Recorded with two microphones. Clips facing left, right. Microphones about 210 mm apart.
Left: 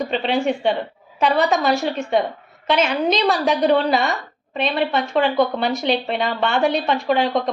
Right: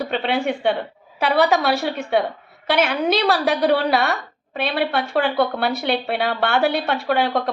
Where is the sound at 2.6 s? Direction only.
65° right (ahead or behind).